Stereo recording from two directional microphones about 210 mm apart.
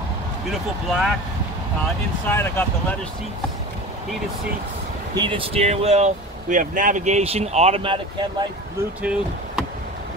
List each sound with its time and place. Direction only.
0.5 s speech: centre (ahead or behind)
2.2 s speech: 10° left (ahead or behind)
5.1 s speech: 25° right (ahead or behind)